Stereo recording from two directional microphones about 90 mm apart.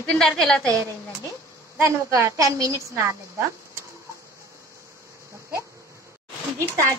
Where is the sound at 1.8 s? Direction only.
30° right (ahead or behind).